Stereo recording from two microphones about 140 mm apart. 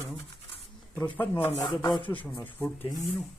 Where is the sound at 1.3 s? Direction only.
25° left (ahead or behind).